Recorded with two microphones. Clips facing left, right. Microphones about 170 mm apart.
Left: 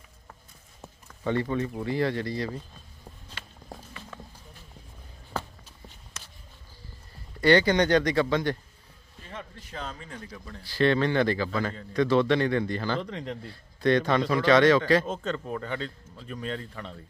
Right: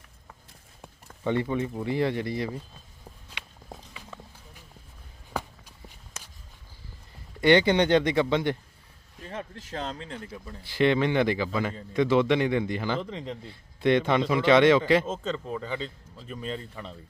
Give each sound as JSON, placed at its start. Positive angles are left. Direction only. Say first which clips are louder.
{"t": 1.2, "sound": "a man's voice", "louder": "right 1 dB", "side_deg": -15}
{"t": 3.9, "sound": "run", "louder": "left 1 dB", "side_deg": -10}
{"t": 5.3, "sound": "walk", "louder": "right 1 dB", "side_deg": -10}
{"t": 7.4, "sound": "speech", "louder": "right 1 dB", "side_deg": -20}
{"t": 9.7, "sound": "a man's voice", "louder": "right 4 dB", "side_deg": -30}
{"t": 13.0, "sound": "a man's voice", "louder": "even", "side_deg": 0}
{"t": 13.4, "sound": "a man's voice", "louder": "right 1 dB", "side_deg": -20}
{"t": 15.0, "sound": "a man's voice", "louder": "even", "side_deg": 0}